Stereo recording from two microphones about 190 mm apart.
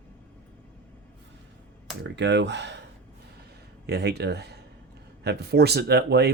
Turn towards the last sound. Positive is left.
turn(degrees=-60)  # may be behind; listen again after turning